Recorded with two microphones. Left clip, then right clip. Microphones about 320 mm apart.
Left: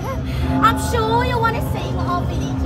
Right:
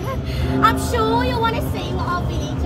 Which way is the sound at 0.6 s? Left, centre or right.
Centre.